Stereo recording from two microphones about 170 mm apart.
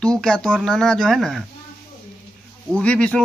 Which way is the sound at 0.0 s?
5° left (ahead or behind).